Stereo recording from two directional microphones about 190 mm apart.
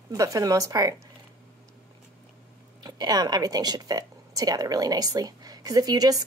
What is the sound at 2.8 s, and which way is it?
A woman's voice, 20° right (ahead or behind).